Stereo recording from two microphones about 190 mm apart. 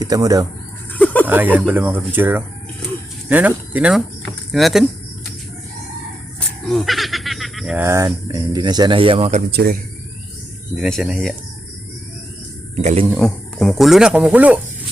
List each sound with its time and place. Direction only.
0.0 s speech: 20° right (ahead or behind)
0.9 s a sound: 10° left (ahead or behind)
1.2 s speech: 10° right (ahead or behind)
6.7 s goat: centre (ahead or behind)
7.9 s speech: 15° right (ahead or behind); by 9.4 s 30° right (ahead or behind)
9.5 s speech: 55° right (ahead or behind)
10.8 s speech: centre (ahead or behind)
12.7 s speech: 35° right (ahead or behind)
13.1 s speech: centre (ahead or behind)